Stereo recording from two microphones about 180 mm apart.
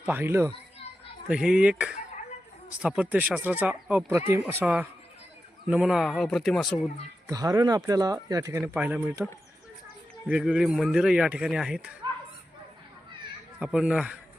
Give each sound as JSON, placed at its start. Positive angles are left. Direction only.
{"t": 0.0, "sound": "speech", "side_deg": -10}
{"t": 7.3, "sound": "speech", "side_deg": -20}
{"t": 8.7, "sound": "speech", "side_deg": -5}
{"t": 13.6, "sound": "speech", "side_deg": -5}